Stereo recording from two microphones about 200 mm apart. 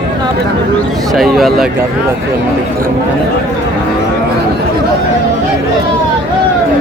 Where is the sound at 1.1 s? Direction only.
Centre (ahead or behind).